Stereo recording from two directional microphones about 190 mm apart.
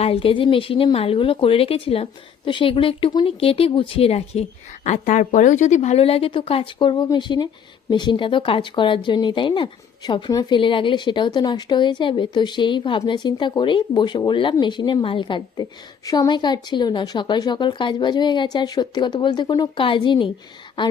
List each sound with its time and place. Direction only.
0.0 s speech: 30° left (ahead or behind)